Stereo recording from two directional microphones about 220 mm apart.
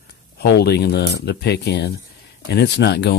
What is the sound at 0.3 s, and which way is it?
Speech, 50° left (ahead or behind).